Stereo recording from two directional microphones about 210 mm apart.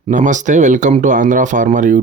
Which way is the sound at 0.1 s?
35° right (ahead or behind).